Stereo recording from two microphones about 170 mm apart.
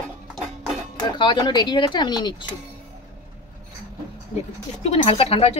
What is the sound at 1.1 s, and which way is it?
Speech, 25° left (ahead or behind).